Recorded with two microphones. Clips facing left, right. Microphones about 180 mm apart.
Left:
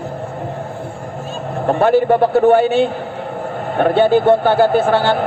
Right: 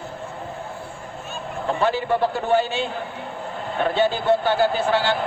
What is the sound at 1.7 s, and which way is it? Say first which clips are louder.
A man's voice: left 9 dB; 55° left (ahead or behind).